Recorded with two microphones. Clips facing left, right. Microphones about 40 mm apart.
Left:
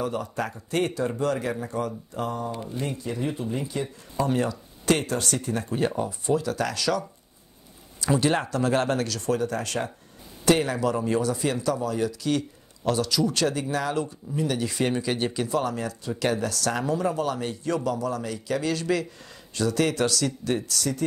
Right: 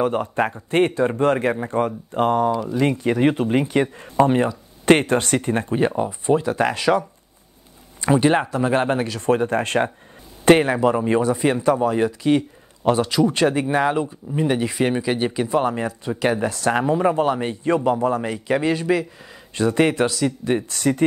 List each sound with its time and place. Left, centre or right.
0.0 s speech: right
2.4 s speech: right
4.8 s speech: right
5.8 s speech: right